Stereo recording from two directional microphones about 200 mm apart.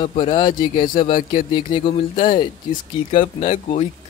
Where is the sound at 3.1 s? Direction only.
30° left (ahead or behind).